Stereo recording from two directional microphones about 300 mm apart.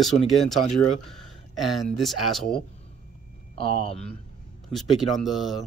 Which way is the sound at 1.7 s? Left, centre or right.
Centre.